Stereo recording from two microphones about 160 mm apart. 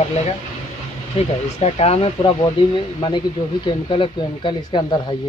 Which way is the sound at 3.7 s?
35° left (ahead or behind).